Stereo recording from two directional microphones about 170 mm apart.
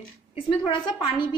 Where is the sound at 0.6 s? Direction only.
30° left (ahead or behind).